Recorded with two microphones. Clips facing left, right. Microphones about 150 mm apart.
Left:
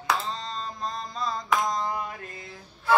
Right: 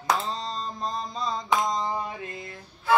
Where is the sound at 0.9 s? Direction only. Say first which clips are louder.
Right 1 dB; centre (ahead or behind).